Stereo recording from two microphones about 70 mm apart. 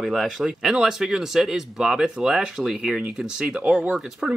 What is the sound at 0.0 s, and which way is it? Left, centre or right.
Speech, centre.